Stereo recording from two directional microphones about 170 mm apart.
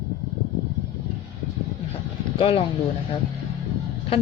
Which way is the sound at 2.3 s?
35° left (ahead or behind).